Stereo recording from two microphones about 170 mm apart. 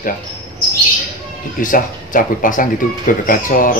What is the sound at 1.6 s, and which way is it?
Speech, 55° left (ahead or behind).